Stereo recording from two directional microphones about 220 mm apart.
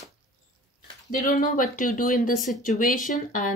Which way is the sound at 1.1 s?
35° left (ahead or behind).